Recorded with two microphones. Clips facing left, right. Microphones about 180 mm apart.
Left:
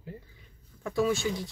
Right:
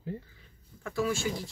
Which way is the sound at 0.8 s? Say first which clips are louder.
Left 3 dB; 20° left (ahead or behind).